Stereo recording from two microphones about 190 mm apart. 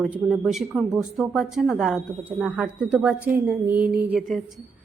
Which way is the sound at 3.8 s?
55° right (ahead or behind).